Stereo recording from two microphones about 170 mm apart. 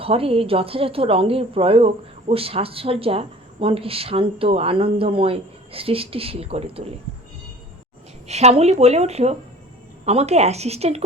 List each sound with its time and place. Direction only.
0.0 s speech: 35° right (ahead or behind)
8.3 s speech: 40° right (ahead or behind)